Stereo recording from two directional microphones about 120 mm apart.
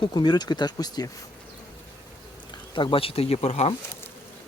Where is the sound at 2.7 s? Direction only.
45° left (ahead or behind); by 3.7 s 65° left (ahead or behind).